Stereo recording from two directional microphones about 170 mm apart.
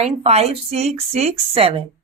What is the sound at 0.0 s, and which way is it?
Speech, 40° right (ahead or behind).